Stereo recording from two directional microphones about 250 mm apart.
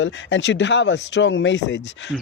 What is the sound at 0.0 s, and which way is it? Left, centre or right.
Speech, left.